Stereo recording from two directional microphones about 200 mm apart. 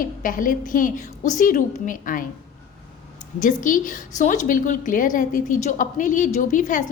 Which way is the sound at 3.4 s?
40° left (ahead or behind).